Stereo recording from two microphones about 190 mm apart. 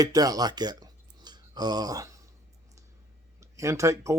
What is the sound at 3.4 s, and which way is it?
Speech, 15° right (ahead or behind).